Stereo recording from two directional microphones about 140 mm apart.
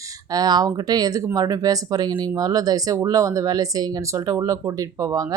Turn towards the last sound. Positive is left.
turn(degrees=-25)  # may be behind; listen again after turning